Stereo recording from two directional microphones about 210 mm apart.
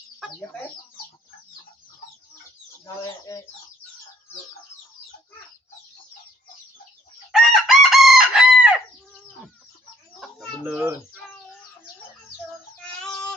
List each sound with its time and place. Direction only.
3.3 s speech: 15° left (ahead or behind)
7.3 s chicken: centre (ahead or behind)
10.2 s chicken: 5° right (ahead or behind)
12.8 s a sound: 5° left (ahead or behind)